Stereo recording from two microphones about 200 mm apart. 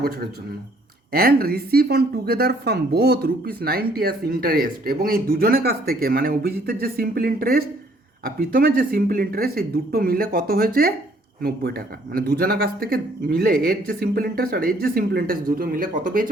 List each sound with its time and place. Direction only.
1.1 s a woman's voice: 50° right (ahead or behind)
12.1 s a woman's voice: 50° right (ahead or behind)